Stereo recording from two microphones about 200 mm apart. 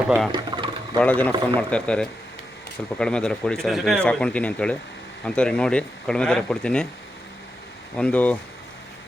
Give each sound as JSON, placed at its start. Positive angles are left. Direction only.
{"t": 0.3, "sound": "a sound", "side_deg": -20}
{"t": 0.9, "sound": "speech", "side_deg": 10}
{"t": 7.9, "sound": "speech", "side_deg": 5}